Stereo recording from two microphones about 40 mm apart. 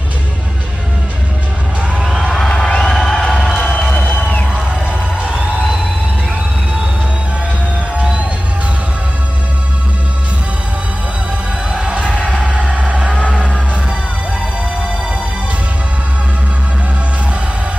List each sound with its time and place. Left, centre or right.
2.5 s music: centre
2.9 s music: centre
3.2 s music: centre
3.9 s music: left
11.7 s music: right
13.2 s music: centre